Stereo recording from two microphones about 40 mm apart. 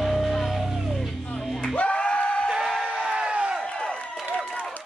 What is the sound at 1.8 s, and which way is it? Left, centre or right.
Music, left.